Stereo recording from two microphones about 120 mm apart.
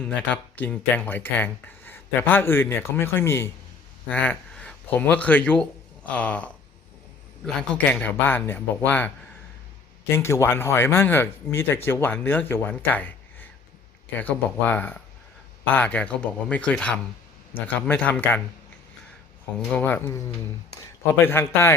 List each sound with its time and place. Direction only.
0.0 s speech: 10° left (ahead or behind)
19.7 s speech: 15° left (ahead or behind)
21.2 s speech: 20° left (ahead or behind)